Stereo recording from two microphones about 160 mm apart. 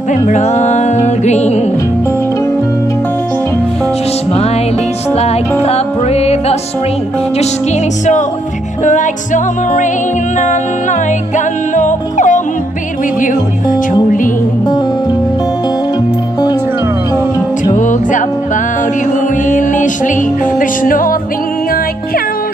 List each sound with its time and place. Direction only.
0.1 s music: 45° left (ahead or behind)
5.1 s music: 40° left (ahead or behind)
8.8 s music: 50° left (ahead or behind)
17.7 s music: 50° left (ahead or behind)
19.5 s music: 55° left (ahead or behind)